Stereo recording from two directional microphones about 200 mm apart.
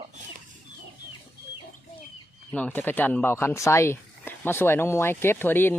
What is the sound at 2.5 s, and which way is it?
Speech, 10° left (ahead or behind).